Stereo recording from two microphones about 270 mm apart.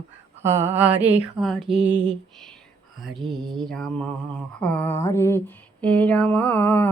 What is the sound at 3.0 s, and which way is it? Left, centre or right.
Mantra, centre.